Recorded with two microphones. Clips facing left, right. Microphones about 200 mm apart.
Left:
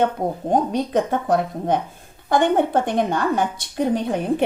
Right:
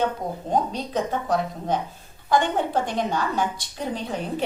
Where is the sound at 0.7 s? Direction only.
55° left (ahead or behind).